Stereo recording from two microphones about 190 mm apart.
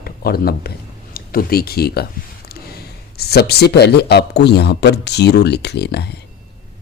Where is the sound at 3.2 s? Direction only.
55° left (ahead or behind).